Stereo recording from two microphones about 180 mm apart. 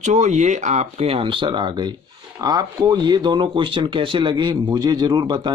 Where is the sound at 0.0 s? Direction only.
40° right (ahead or behind).